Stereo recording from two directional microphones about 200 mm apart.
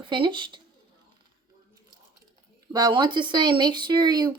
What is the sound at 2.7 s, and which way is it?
Speech, 20° right (ahead or behind).